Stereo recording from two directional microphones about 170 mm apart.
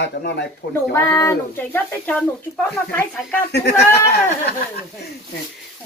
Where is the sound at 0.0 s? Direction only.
85° left.